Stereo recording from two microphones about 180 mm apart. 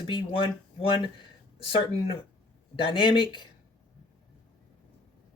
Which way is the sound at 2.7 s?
30° left (ahead or behind).